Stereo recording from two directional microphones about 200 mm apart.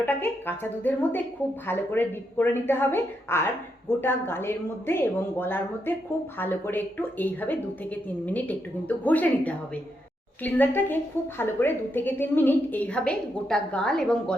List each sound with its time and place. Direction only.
0.0 s a woman's voice: 10° left (ahead or behind)